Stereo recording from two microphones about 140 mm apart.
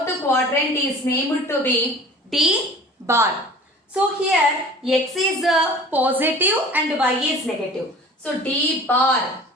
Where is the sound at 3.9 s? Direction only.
10° right (ahead or behind).